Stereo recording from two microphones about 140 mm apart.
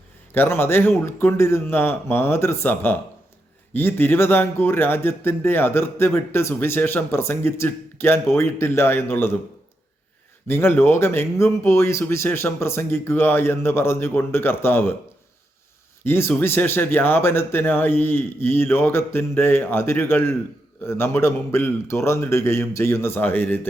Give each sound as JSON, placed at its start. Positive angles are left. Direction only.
{"t": 0.3, "sound": "speech", "side_deg": 15}
{"t": 10.4, "sound": "speech", "side_deg": 15}
{"t": 16.0, "sound": "speech", "side_deg": 15}